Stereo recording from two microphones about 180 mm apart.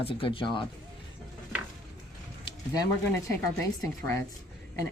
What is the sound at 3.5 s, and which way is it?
Speech, 10° left (ahead or behind).